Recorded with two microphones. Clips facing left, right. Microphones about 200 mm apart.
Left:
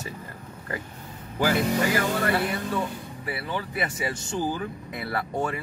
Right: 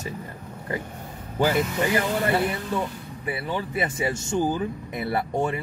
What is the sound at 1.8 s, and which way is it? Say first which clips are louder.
Speech: right 1 dB; 20° right (ahead or behind).